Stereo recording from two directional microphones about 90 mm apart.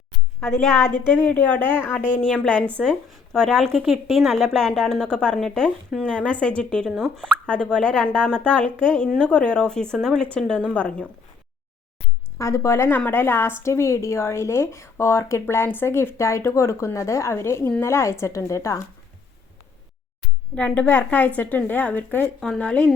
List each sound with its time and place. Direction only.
0.3 s a woman's voice: 25° left (ahead or behind); by 3.8 s 5° left (ahead or behind)
3.8 s a woman's voice: 5° right (ahead or behind); by 11.1 s 15° left (ahead or behind)
12.4 s a woman's voice: 35° left (ahead or behind)
20.6 s speech: 20° left (ahead or behind)
22.4 s speech: 10° left (ahead or behind)